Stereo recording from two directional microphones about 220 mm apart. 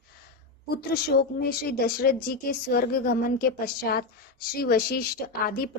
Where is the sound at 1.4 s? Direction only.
40° left (ahead or behind).